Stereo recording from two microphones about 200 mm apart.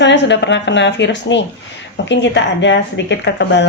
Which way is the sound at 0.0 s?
60° left (ahead or behind).